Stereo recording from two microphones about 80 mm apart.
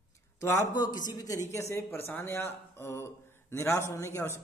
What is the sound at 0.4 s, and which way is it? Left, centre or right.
Speech, left.